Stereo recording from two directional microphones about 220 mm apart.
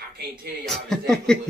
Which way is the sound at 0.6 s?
Centre (ahead or behind).